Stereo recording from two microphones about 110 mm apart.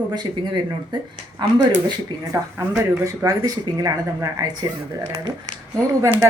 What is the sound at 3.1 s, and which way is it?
Speech, 30° right (ahead or behind).